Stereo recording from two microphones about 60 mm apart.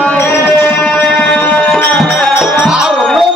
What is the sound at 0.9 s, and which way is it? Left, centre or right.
Music, left.